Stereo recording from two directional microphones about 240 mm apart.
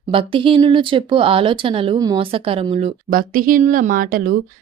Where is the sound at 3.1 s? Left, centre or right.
Right.